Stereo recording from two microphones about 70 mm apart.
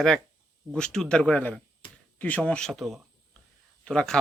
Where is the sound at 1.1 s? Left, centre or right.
Centre.